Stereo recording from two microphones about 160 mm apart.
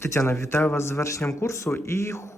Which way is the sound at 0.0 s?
15° left (ahead or behind).